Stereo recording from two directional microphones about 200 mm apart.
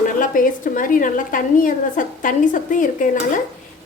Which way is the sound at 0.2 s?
40° left (ahead or behind).